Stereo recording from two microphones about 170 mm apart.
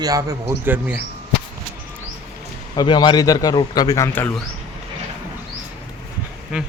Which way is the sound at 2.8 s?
25° left (ahead or behind).